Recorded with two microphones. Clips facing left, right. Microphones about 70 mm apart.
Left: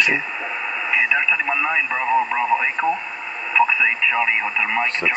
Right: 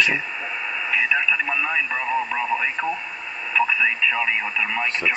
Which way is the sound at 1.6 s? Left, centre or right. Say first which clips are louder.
Left 3 dB; left.